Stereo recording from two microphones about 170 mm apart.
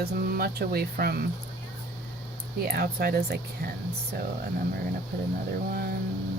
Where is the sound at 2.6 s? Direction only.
65° right (ahead or behind).